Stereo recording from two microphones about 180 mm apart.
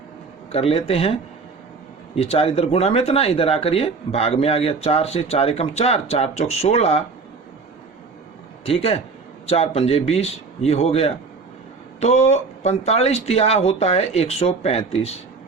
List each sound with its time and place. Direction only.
0.5 s speech: 35° left (ahead or behind)
8.6 s speech: 35° left (ahead or behind)